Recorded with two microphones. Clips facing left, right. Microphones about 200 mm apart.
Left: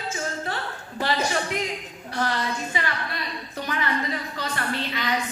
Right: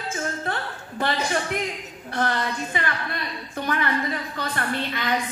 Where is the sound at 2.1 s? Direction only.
55° right (ahead or behind).